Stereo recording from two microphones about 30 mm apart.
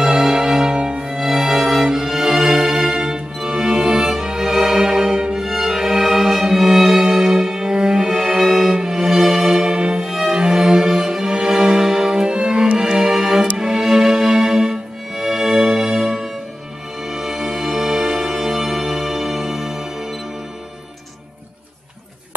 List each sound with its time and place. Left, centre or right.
0.0 s music: right
1.0 s music: centre
2.9 s music: right
5.3 s music: centre
8.7 s music: right